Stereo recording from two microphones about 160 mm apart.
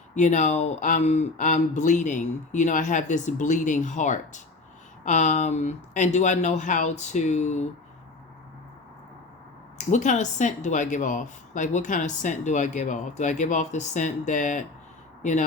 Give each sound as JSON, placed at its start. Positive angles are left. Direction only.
{"t": 0.1, "sound": "speech", "side_deg": 50}
{"t": 9.7, "sound": "speech", "side_deg": 50}